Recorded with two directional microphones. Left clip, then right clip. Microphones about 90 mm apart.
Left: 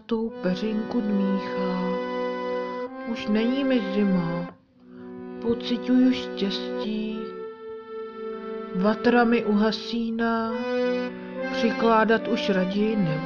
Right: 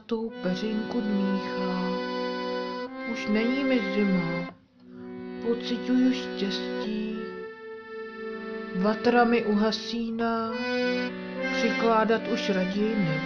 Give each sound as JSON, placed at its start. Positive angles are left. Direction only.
{"t": 0.1, "sound": "speech", "side_deg": 30}
{"t": 1.9, "sound": "music", "side_deg": 40}
{"t": 3.3, "sound": "speech", "side_deg": 30}
{"t": 5.4, "sound": "music", "side_deg": 30}
{"t": 8.7, "sound": "speech", "side_deg": 30}